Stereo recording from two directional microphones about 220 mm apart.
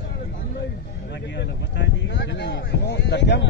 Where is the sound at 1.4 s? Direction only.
55° left (ahead or behind).